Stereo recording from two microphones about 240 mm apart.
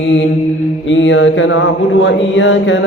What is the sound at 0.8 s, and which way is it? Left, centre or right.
Speech, left.